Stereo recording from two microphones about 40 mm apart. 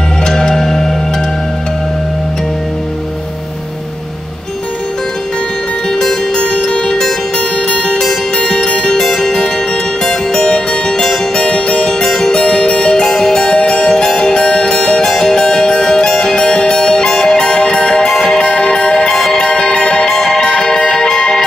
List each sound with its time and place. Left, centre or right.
0.2 s music: centre
6.3 s music: left
11.0 s music: centre
11.4 s music: left
12.0 s music: centre
12.4 s music: left
13.1 s music: centre
13.4 s music: left
18.4 s music: left